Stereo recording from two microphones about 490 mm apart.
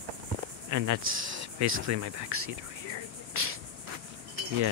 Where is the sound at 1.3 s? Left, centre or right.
Right.